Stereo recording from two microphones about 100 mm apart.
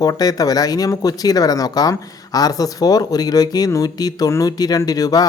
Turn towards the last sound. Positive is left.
turn(degrees=40)  # may be behind; listen again after turning